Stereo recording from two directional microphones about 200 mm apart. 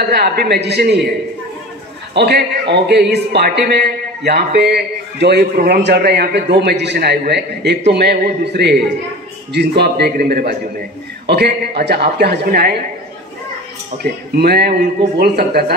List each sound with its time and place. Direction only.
0.1 s a man's voice: 55° right (ahead or behind)
2.1 s a man's voice: 55° right (ahead or behind)
14.3 s a woman's voice: 50° right (ahead or behind)